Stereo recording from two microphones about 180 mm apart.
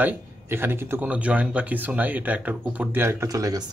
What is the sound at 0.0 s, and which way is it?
Speech, 10° right (ahead or behind).